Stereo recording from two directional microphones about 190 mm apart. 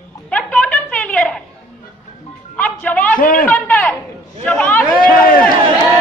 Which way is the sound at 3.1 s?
45° left (ahead or behind).